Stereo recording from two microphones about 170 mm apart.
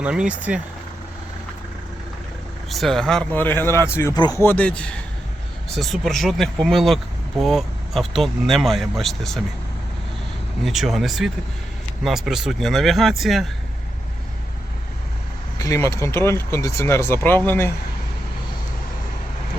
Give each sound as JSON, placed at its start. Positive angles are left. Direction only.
{"t": 0.0, "sound": "speech", "side_deg": -5}
{"t": 2.6, "sound": "speech", "side_deg": 0}
{"t": 4.4, "sound": "speech", "side_deg": 10}
{"t": 10.6, "sound": "speech", "side_deg": 0}
{"t": 15.5, "sound": "speech", "side_deg": 20}